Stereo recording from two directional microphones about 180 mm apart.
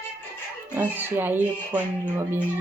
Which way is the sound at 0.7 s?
10° right (ahead or behind).